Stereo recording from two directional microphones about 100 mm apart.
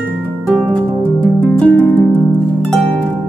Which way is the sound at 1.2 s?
15° left (ahead or behind).